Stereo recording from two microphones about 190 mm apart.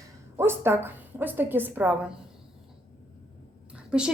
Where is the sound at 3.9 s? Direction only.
5° right (ahead or behind).